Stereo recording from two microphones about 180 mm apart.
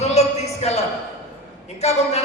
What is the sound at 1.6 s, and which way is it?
Speech, 35° left (ahead or behind).